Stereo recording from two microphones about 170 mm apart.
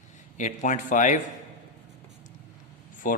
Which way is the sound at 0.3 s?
45° left (ahead or behind).